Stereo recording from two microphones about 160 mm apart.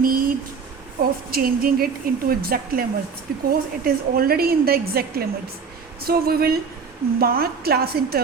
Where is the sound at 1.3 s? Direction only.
65° right (ahead or behind).